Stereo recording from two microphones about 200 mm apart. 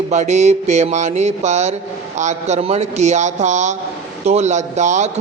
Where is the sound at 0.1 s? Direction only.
35° right (ahead or behind).